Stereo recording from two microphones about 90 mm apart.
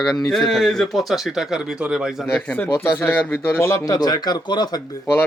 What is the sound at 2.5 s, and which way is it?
Speech, 20° left (ahead or behind).